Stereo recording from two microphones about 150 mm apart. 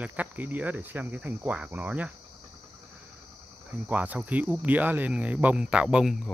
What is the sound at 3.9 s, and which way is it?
Speech, 10° right (ahead or behind).